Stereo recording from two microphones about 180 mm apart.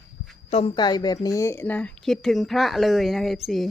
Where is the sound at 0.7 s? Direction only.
25° left (ahead or behind).